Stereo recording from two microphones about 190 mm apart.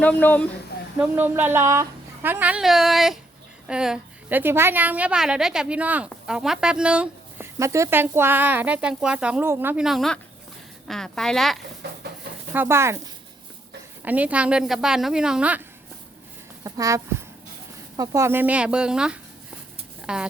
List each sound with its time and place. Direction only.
0.0 s speech: 10° left (ahead or behind)
0.9 s a woman's voice: 10° right (ahead or behind)
12.5 s a woman's voice: 15° right (ahead or behind)
14.0 s a woman's voice: 10° right (ahead or behind)
16.6 s a woman's voice: 15° right (ahead or behind)
20.0 s a sound: 5° right (ahead or behind)